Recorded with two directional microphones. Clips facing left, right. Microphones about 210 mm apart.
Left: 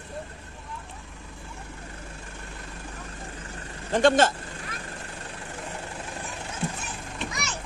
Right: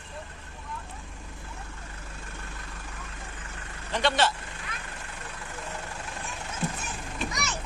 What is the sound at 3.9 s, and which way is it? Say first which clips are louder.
Vehicle: left 6 dB; 50° left (ahead or behind).